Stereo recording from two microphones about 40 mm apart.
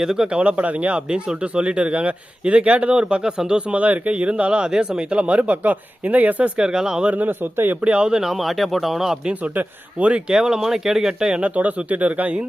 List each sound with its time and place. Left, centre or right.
0.0 s speech: centre
0.4 s speech: right
1.0 s a man's voice: right
3.7 s speech: right
6.6 s speech: centre
7.2 s speech: right
7.9 s a man's voice: right
8.1 s speech: centre
8.4 s speech: centre
9.3 s speech: right
10.3 s speech: centre
11.4 s speech: right